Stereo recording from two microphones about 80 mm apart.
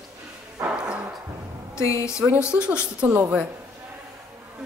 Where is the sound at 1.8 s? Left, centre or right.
Left.